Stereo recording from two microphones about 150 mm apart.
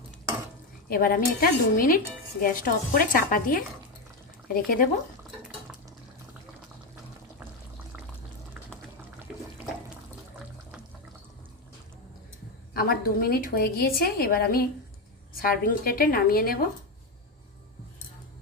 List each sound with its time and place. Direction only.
0.9 s a woman's voice: 70° left (ahead or behind)
12.7 s a woman's voice: 80° left